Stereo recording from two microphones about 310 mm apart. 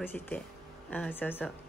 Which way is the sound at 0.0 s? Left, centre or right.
Centre.